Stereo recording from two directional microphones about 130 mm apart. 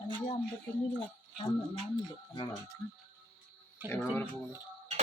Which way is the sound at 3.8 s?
10° right (ahead or behind).